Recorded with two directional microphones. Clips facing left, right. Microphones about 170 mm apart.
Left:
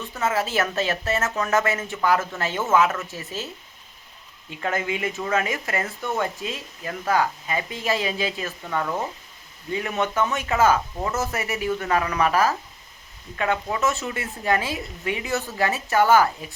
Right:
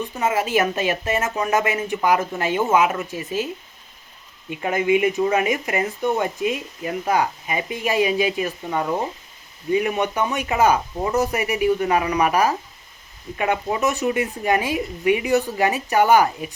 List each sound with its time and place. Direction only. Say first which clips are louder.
0.0 s speech: right 3 dB; 15° right (ahead or behind)